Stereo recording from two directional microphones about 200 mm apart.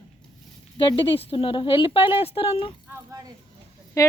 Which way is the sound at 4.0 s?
15° left (ahead or behind).